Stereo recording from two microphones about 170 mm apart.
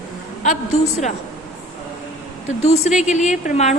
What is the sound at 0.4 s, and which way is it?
Speech, 45° left (ahead or behind).